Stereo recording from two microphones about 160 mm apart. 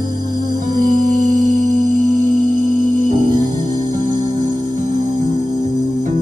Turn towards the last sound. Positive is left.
turn(degrees=-25)  # may be behind; listen again after turning